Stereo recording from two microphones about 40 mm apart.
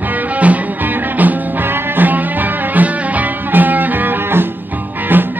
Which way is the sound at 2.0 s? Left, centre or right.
Right.